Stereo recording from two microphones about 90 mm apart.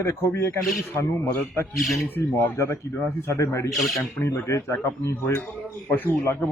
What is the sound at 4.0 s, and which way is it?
Speech, 25° left (ahead or behind).